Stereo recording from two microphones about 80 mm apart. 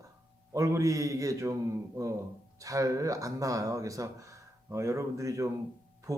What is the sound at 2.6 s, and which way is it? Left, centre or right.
Speech, right.